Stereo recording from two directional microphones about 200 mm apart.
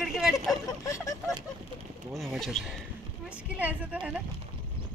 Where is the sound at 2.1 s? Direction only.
Centre (ahead or behind).